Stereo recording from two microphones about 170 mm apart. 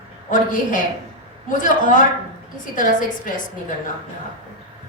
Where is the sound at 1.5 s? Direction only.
50° left (ahead or behind).